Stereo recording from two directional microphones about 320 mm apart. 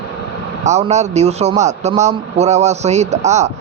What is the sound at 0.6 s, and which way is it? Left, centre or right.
A man's voice, right.